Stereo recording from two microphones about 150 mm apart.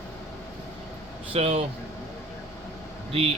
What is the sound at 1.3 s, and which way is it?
Air conditioning, 45° right (ahead or behind).